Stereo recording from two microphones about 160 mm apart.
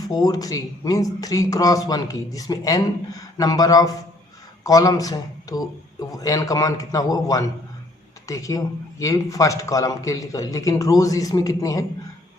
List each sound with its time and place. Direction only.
0.1 s a man's voice: 25° left (ahead or behind)